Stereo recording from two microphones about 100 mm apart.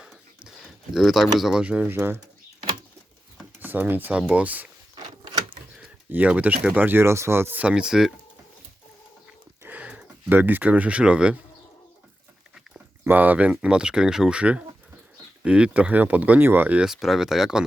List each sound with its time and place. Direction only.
0.0 s speech: 5° right (ahead or behind); by 2.2 s 20° right (ahead or behind)
3.6 s speech: 20° right (ahead or behind)
4.9 s door: 45° right (ahead or behind)
6.1 s speech: 15° right (ahead or behind)
9.6 s speech: 15° right (ahead or behind)
13.1 s speech: 15° right (ahead or behind)